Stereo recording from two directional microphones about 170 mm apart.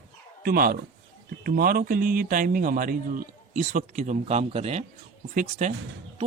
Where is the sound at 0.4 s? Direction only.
60° right (ahead or behind); by 4.9 s 40° right (ahead or behind).